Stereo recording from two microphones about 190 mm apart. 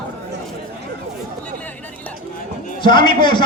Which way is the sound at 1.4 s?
10° left (ahead or behind).